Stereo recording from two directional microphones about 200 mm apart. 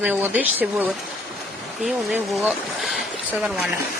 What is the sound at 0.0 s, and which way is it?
Speech, 10° right (ahead or behind).